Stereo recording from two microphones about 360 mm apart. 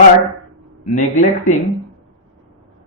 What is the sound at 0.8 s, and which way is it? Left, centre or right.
Speech, centre.